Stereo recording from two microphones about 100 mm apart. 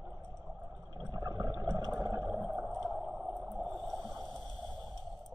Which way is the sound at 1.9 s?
30° right (ahead or behind).